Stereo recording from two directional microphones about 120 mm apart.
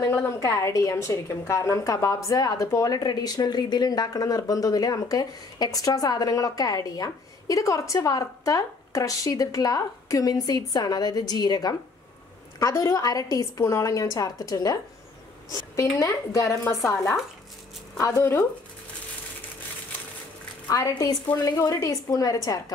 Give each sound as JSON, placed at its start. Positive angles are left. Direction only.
{"t": 0.4, "sound": "a woman's voice", "side_deg": 25}
{"t": 20.7, "sound": "a woman's voice", "side_deg": 30}